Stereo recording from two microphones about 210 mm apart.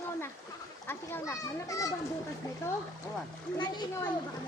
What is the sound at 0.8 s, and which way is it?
A child's voice, 10° left (ahead or behind).